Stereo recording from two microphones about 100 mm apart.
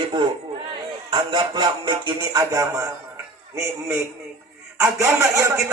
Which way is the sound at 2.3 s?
40° right (ahead or behind).